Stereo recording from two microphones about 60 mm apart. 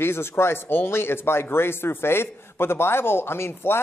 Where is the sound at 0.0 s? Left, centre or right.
Left.